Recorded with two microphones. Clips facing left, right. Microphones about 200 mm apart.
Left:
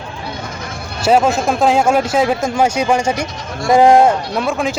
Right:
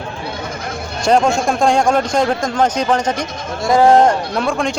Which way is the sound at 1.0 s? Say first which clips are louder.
Left 1 dB; 5° left (ahead or behind).